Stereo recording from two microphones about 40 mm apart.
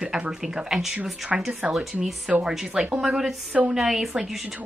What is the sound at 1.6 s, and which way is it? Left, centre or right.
A woman's voice, right.